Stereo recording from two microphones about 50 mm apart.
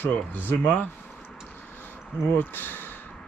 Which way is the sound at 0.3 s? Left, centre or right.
Left.